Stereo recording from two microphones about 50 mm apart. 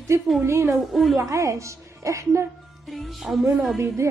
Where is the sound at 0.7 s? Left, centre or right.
Centre.